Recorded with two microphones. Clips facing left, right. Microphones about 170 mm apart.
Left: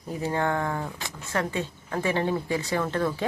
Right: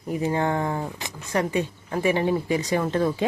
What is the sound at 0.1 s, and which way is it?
Speech, 15° right (ahead or behind).